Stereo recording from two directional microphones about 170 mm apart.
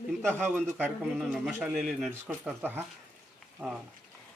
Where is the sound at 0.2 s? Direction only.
5° left (ahead or behind).